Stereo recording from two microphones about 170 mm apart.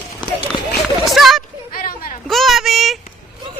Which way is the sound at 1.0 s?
Centre (ahead or behind).